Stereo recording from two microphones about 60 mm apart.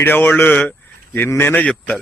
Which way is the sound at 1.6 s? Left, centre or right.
Left.